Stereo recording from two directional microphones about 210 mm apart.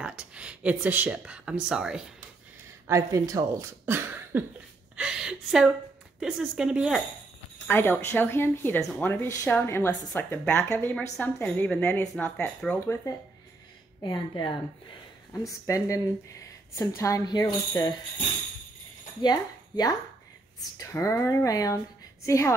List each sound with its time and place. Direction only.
0.0 s speech: 5° right (ahead or behind)
2.9 s a woman's voice: 15° right (ahead or behind)
7.6 s a woman's voice: 10° left (ahead or behind)
15.6 s speech: 15° left (ahead or behind)
19.2 s a woman's voice: 20° left (ahead or behind)